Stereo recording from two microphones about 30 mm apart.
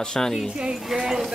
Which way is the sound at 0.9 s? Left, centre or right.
Centre.